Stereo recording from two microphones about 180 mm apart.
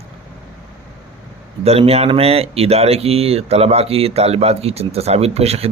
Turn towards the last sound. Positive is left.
turn(degrees=-35)  # may be behind; listen again after turning